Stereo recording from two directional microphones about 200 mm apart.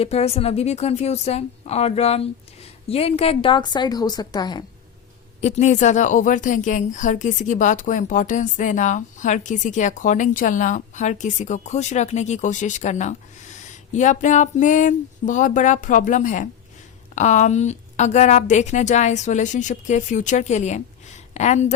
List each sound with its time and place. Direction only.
0.0 s a woman's voice: 30° left (ahead or behind)
5.4 s a woman's voice: 35° left (ahead or behind)